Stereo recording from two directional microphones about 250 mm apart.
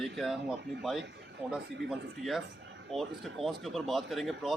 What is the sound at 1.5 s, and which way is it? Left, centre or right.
Speech, centre.